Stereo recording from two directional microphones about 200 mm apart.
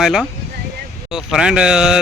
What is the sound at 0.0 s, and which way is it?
Speech, centre (ahead or behind).